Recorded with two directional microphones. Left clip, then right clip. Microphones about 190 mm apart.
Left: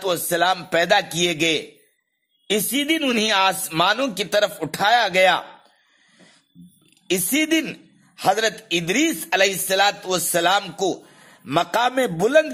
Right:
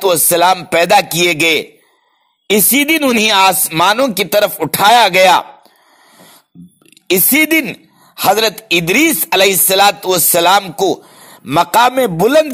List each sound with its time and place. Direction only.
0.0 s speech: 30° right (ahead or behind)
3.2 s rapping: 30° right (ahead or behind)
7.1 s a man's voice: 30° right (ahead or behind)